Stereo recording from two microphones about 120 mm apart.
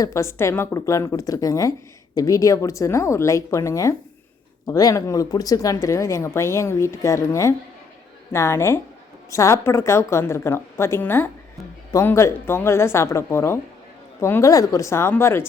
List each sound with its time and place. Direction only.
0.0 s speech: 25° left (ahead or behind)